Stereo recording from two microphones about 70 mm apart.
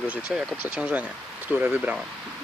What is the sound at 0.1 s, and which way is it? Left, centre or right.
Speech, centre.